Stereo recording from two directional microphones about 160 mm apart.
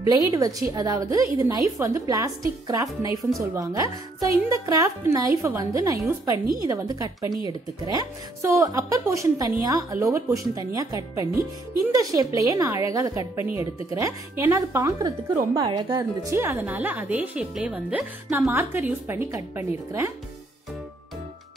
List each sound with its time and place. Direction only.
0.3 s a woman's voice: 20° right (ahead or behind)
16.0 s speech: 15° right (ahead or behind)